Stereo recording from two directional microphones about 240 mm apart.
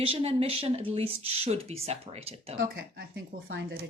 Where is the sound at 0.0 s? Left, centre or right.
Right.